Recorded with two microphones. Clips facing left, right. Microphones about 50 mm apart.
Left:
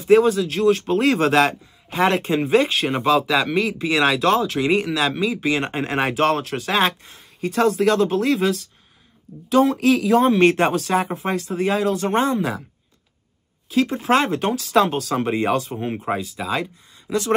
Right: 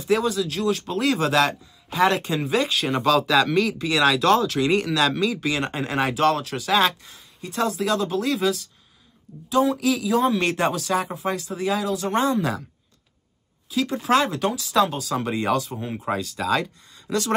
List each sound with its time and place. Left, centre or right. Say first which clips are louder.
0.0 s speech: left 7 dB; left
7.3 s speech: left 7 dB; left
7.6 s speech: left 5 dB; left
9.5 s speech: left 4 dB; left
9.8 s speech: left 5 dB; left
10.3 s speech: left 6 dB; left
13.7 s speech: left 3 dB; left
14.7 s speech: left 4 dB; left
15.1 s speech: left 2 dB; left